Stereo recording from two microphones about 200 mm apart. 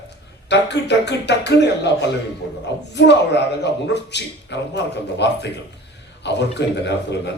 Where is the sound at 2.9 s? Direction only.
60° left (ahead or behind).